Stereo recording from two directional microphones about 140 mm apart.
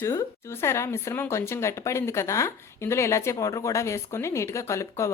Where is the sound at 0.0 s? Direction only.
20° left (ahead or behind).